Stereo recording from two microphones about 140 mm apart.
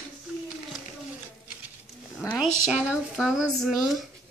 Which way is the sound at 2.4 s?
5° right (ahead or behind).